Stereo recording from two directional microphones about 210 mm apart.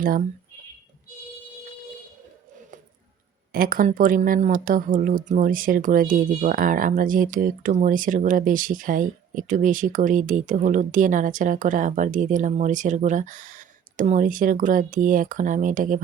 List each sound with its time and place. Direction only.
3.5 s speech: 40° right (ahead or behind)